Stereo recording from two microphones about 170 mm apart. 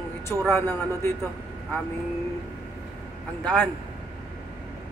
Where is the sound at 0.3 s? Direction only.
10° left (ahead or behind).